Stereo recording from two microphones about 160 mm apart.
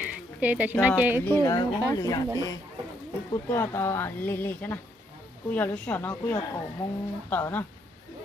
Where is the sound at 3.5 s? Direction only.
15° left (ahead or behind).